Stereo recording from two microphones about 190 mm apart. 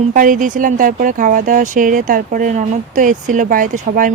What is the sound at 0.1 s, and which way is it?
Speech, 45° right (ahead or behind).